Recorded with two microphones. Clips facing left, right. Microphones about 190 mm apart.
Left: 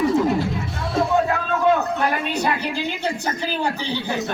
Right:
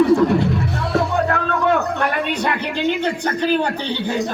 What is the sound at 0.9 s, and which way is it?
Music, 65° right (ahead or behind).